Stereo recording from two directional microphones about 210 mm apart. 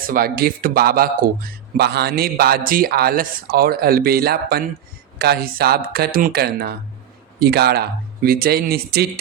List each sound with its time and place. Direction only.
0.0 s a man's voice: 45° right (ahead or behind)